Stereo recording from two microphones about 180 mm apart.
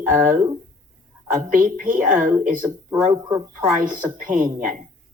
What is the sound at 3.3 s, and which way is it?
Speech, 10° right (ahead or behind).